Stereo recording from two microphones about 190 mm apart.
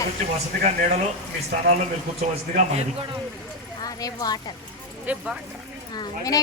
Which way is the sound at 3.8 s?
20° left (ahead or behind).